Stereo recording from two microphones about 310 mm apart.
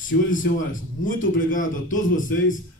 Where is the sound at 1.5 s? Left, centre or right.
Left.